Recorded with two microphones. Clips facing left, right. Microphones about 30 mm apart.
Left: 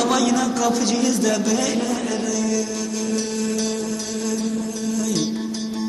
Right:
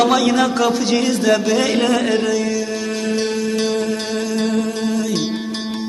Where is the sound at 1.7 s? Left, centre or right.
Right.